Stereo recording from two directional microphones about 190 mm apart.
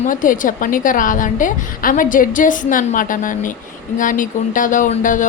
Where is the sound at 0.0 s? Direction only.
45° left (ahead or behind).